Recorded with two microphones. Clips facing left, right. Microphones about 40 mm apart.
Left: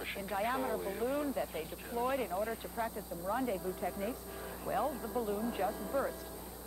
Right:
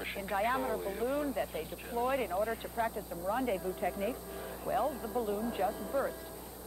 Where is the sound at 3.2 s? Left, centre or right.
Centre.